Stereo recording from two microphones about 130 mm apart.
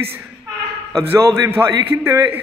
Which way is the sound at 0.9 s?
20° right (ahead or behind).